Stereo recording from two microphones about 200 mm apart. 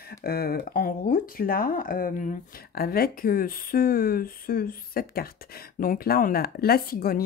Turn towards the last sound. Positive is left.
turn(degrees=50)  # may be behind; listen again after turning